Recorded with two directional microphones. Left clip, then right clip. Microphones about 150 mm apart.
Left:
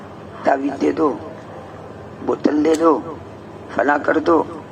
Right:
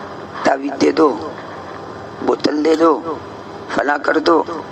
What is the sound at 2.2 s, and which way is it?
A man's voice, 30° right (ahead or behind).